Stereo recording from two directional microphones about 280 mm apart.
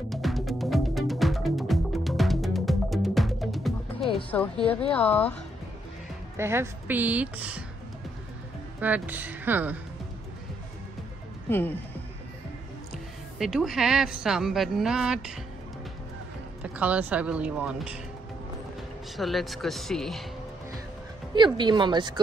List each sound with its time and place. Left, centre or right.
0.1 s music: centre
4.3 s speech: centre
6.3 s speech: centre
8.8 s speech: centre
11.4 s speech: centre
12.9 s speech: centre
16.6 s speech: centre
19.1 s speech: centre
21.4 s speech: centre